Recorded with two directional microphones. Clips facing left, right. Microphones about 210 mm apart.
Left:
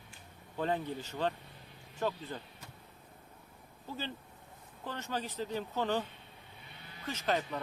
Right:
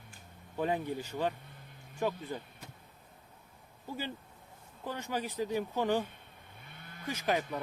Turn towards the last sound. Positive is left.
turn(degrees=-10)  # may be behind; listen again after turning